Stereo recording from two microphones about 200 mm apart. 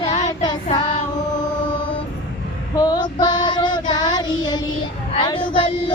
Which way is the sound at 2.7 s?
20° left (ahead or behind).